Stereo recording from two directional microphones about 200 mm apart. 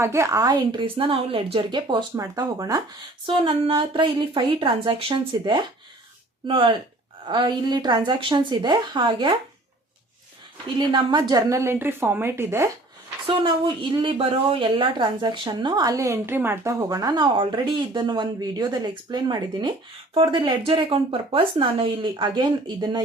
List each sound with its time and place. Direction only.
0.0 s speech: 15° right (ahead or behind)
10.8 s a woman's voice: 20° right (ahead or behind)
13.9 s speech: 25° right (ahead or behind)